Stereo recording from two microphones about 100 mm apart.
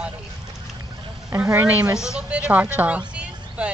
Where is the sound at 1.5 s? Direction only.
20° right (ahead or behind).